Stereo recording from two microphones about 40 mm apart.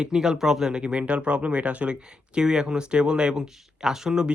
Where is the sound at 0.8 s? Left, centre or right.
Right.